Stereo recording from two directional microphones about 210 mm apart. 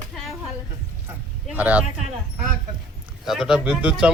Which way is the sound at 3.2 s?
Centre (ahead or behind).